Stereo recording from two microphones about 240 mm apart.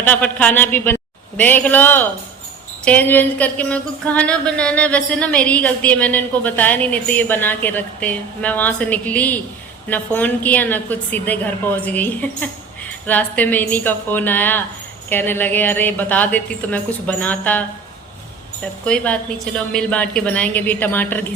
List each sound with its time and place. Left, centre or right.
0.0 s speech: centre
18.9 s a woman's voice: centre